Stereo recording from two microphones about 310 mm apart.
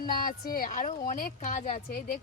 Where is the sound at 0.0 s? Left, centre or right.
Left.